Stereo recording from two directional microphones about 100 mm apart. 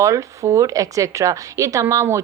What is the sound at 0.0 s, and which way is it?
Speech, 30° right (ahead or behind).